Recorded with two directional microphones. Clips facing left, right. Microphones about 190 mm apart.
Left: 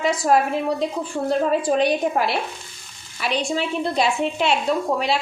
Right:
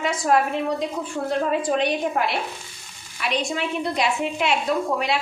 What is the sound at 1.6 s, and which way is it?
A woman's voice, 35° left (ahead or behind).